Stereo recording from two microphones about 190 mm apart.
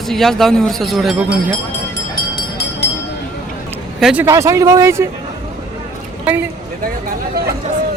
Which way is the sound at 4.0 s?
5° right (ahead or behind).